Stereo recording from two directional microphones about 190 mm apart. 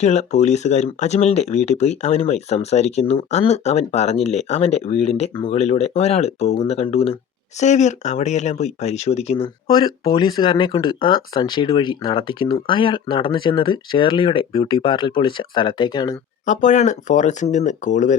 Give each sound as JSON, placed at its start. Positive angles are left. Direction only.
{"t": 0.0, "sound": "speech", "side_deg": 35}
{"t": 9.6, "sound": "speech", "side_deg": 20}
{"t": 16.5, "sound": "speech", "side_deg": 40}